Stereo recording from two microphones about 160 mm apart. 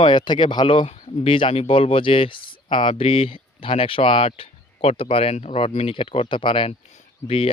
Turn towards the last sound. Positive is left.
turn(degrees=35)  # may be behind; listen again after turning